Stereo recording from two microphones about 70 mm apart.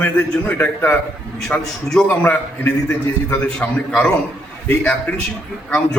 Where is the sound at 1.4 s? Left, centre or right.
Centre.